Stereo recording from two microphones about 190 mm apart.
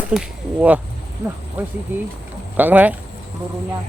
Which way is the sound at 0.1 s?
5° right (ahead or behind).